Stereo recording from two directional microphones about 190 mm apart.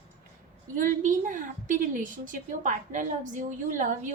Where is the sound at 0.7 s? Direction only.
45° right (ahead or behind).